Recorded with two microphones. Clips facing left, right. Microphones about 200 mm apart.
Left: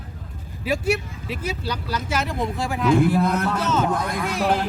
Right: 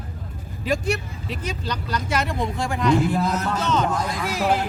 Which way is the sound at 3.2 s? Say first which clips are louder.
Left 2 dB; 55° left (ahead or behind).